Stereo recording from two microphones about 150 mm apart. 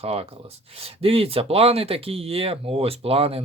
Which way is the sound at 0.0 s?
40° right (ahead or behind).